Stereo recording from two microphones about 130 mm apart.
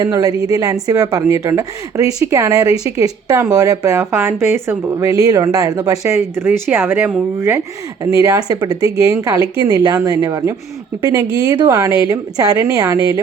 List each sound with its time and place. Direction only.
0.0 s a woman's voice: 30° right (ahead or behind)
8.2 s a woman's voice: 25° right (ahead or behind)